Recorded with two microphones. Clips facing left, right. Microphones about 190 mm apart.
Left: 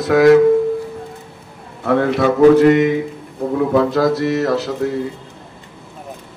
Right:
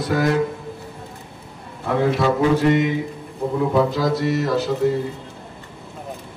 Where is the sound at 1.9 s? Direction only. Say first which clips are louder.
Left 4 dB; 65° left (ahead or behind).